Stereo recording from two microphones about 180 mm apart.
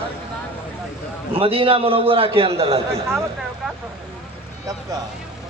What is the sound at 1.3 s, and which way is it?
A man's voice, 30° right (ahead or behind).